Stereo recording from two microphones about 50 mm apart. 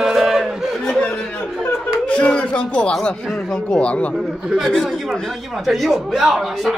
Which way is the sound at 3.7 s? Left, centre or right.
Left.